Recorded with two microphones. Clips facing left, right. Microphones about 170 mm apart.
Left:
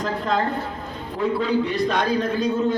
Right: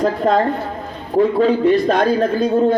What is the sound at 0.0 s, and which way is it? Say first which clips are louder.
A man's voice: right 8 dB; 50° right (ahead or behind).